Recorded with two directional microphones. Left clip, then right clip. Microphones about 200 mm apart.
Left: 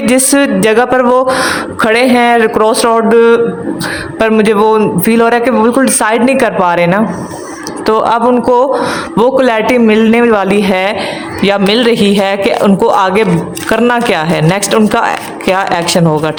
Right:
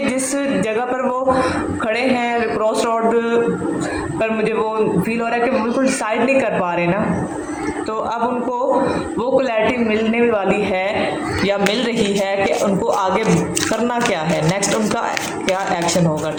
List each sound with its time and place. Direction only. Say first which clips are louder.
0.1 s a man's voice: left 11 dB; 50° left (ahead or behind)